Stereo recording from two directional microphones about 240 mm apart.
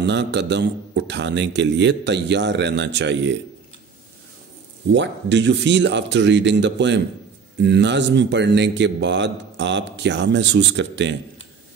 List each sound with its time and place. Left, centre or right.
0.0 s a man's voice: right
4.9 s a man's voice: right